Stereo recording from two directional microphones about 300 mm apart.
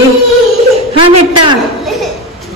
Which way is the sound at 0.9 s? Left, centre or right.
Centre.